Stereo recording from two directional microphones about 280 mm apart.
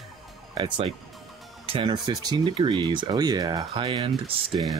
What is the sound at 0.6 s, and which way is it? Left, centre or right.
Speech, centre.